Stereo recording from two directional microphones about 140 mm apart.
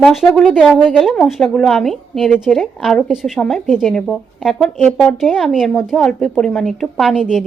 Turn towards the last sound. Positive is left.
turn(degrees=-5)  # may be behind; listen again after turning